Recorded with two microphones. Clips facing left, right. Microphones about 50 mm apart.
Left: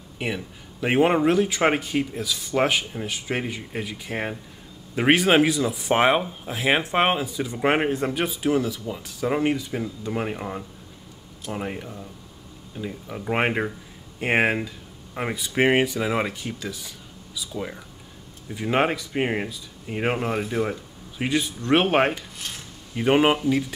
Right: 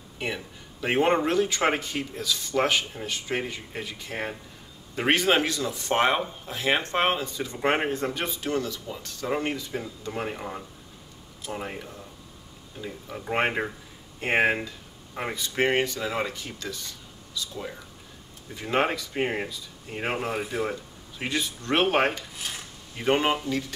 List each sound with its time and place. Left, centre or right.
0.2 s speech: centre
22.4 s filing: centre
22.9 s speech: centre